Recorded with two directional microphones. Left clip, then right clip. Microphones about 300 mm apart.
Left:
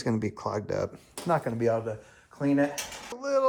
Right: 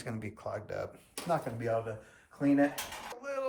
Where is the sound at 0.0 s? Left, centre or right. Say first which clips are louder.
Left 10 dB; centre.